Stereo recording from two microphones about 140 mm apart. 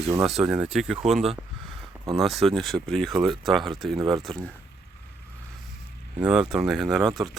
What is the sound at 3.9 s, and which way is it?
Speech, 35° right (ahead or behind).